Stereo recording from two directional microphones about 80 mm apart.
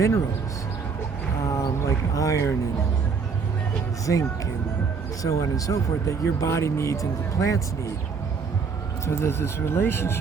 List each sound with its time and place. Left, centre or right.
1.5 s a sound: left
4.0 s speech: left
9.0 s speech: left